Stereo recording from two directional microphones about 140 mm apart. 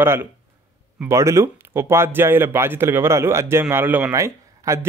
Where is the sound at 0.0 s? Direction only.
15° right (ahead or behind).